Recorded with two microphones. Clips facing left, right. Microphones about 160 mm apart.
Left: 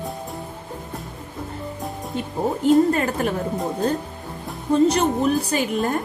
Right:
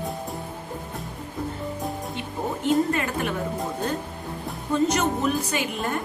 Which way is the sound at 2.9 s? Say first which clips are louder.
Left 4 dB; 40° left (ahead or behind).